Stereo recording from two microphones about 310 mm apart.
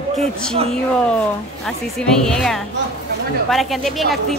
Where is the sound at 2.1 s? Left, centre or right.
Centre.